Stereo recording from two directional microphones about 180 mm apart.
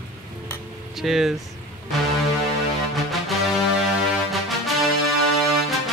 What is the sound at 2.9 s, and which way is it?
Music, centre (ahead or behind).